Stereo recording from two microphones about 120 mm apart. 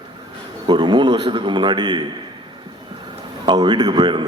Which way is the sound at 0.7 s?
40° right (ahead or behind).